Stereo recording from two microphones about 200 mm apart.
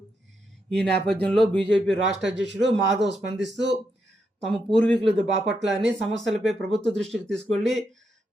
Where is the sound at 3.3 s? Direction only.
60° right (ahead or behind).